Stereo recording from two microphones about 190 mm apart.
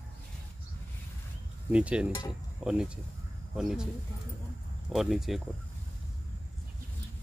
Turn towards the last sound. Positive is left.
turn(degrees=0)  # may be behind; listen again after turning